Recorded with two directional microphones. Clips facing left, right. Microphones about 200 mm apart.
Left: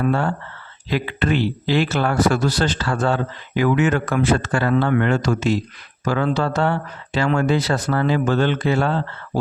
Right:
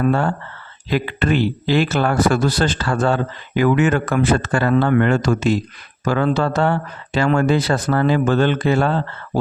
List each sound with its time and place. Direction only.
0.9 s speech: 45° right (ahead or behind)